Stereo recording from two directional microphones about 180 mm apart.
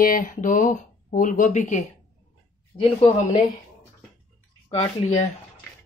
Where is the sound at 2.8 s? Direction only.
30° left (ahead or behind).